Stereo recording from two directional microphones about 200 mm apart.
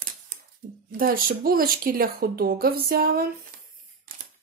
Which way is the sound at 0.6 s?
45° right (ahead or behind).